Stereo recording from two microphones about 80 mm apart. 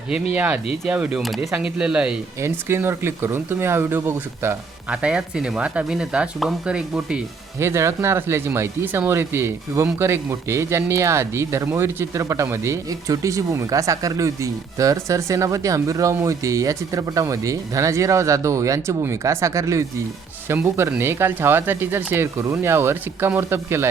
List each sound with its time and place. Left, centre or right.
0.1 s speech: centre
2.4 s speech: right
4.9 s speech: centre
7.6 s speech: right